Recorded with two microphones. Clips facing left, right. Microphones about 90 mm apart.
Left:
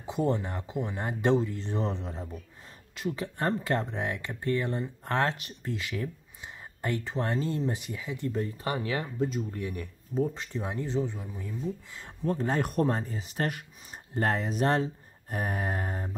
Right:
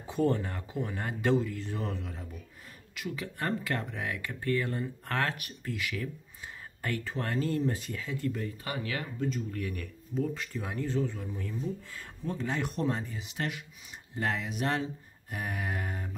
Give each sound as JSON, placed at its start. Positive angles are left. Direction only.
{"t": 0.0, "sound": "speech", "side_deg": 20}
{"t": 8.3, "sound": "speech", "side_deg": 30}
{"t": 12.3, "sound": "speech", "side_deg": 40}